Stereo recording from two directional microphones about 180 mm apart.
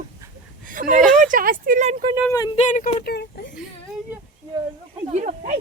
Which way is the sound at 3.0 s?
60° left (ahead or behind).